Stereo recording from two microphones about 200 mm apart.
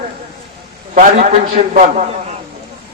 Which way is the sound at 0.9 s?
40° right (ahead or behind).